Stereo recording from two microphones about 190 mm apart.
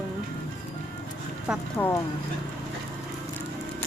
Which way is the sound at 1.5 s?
5° right (ahead or behind).